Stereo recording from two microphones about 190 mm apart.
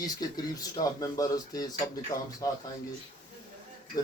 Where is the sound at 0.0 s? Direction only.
20° left (ahead or behind).